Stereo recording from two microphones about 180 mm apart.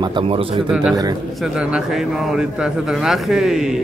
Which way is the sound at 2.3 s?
5° right (ahead or behind).